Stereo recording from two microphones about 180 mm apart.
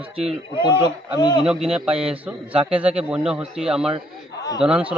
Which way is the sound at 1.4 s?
5° right (ahead or behind).